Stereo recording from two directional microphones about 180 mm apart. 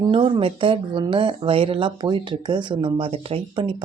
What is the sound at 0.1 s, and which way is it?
Speech, 30° right (ahead or behind).